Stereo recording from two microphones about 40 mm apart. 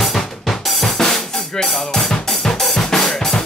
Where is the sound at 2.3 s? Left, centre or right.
Centre.